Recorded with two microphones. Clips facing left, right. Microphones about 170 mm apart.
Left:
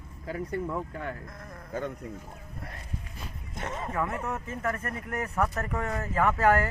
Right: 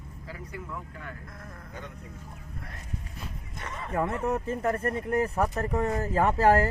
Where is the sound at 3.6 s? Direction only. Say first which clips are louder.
Left 5 dB; 50° left (ahead or behind).